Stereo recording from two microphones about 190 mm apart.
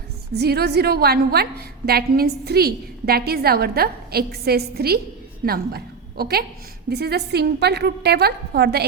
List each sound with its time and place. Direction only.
0.3 s a woman's voice: 55° right (ahead or behind)